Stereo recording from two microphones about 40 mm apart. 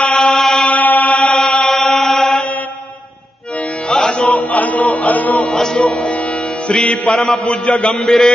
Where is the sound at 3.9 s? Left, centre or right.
Centre.